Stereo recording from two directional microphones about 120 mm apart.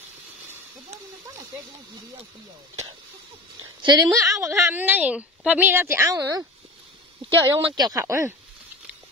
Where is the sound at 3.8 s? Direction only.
35° right (ahead or behind).